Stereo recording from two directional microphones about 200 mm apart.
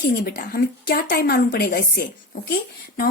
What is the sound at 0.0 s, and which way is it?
A woman's voice, 50° left (ahead or behind).